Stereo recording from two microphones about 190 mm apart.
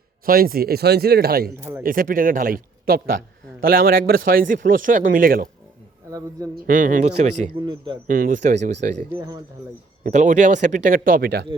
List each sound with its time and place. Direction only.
0.3 s a man's voice: 50° right (ahead or behind)
6.1 s a man's voice: 20° right (ahead or behind)
6.7 s a man's voice: 45° right (ahead or behind)
7.6 s a man's voice: 25° right (ahead or behind)
8.0 s speech: 45° right (ahead or behind)
9.1 s a man's voice: 20° right (ahead or behind)
10.0 s a man's voice: 40° right (ahead or behind)